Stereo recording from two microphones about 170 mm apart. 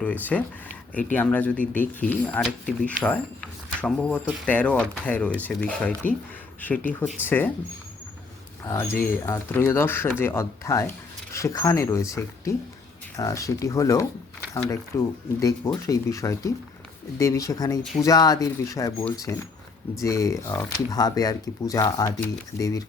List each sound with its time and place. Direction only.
0.0 s speech: 10° left (ahead or behind)
8.6 s speech: 15° left (ahead or behind)